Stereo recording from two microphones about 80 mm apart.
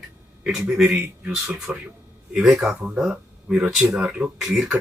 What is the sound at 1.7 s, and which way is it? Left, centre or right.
Speech, centre.